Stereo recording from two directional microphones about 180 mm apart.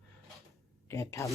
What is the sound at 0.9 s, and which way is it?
Speech, 15° left (ahead or behind).